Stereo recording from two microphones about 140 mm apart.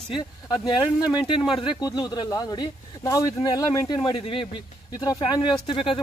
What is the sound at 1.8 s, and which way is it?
Speech, 30° left (ahead or behind).